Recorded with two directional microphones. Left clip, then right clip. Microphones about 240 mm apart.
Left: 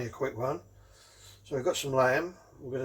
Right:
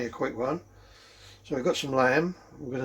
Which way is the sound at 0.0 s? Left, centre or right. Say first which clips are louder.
Right 3 dB; right.